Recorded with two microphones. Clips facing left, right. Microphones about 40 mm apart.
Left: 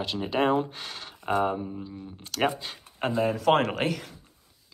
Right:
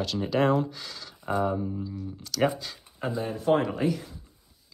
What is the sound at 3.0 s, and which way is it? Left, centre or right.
Speech, left.